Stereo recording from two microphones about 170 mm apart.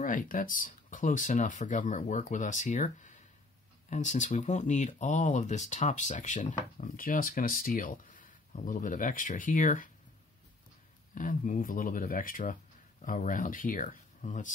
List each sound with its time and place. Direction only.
0.0 s speech: 50° left (ahead or behind)
11.1 s speech: 50° left (ahead or behind)